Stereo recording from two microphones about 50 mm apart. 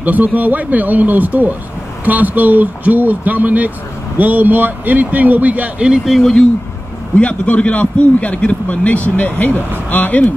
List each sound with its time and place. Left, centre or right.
0.0 s speech: right
6.0 s speech: centre
7.2 s a man's voice: left